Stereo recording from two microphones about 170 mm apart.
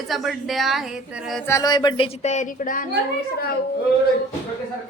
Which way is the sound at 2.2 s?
45° left (ahead or behind).